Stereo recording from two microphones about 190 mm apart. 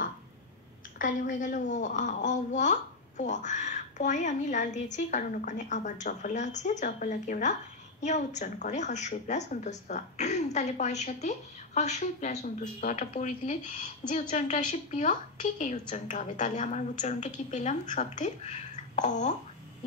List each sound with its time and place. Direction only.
0.9 s a woman's voice: 45° left (ahead or behind)